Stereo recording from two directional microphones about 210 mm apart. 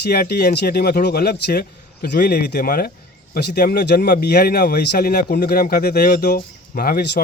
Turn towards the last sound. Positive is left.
turn(degrees=45)  # may be behind; listen again after turning